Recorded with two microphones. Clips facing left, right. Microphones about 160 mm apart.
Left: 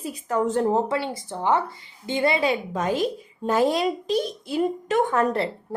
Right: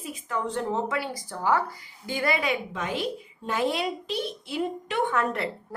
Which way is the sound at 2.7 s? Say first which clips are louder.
Left 6 dB; 40° left (ahead or behind).